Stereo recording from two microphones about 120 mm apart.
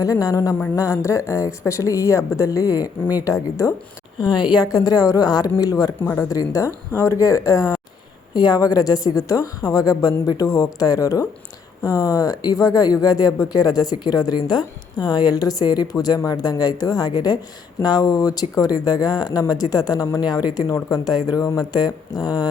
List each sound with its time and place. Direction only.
0.0 s a woman's voice: 30° left (ahead or behind)
4.2 s a woman's voice: 40° left (ahead or behind)